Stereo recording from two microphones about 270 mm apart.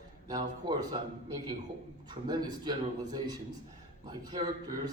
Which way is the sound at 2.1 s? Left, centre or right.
Centre.